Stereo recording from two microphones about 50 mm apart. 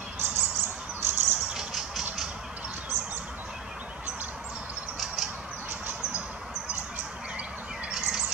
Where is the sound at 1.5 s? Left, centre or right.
Centre.